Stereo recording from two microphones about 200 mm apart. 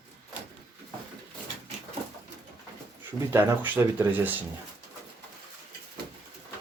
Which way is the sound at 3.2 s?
10° right (ahead or behind).